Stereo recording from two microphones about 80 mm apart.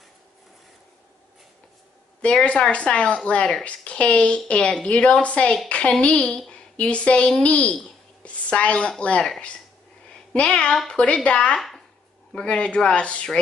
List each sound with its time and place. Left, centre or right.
2.2 s a woman's voice: centre
8.2 s a sound: centre
9.0 s a woman's voice: centre
10.3 s a woman's voice: centre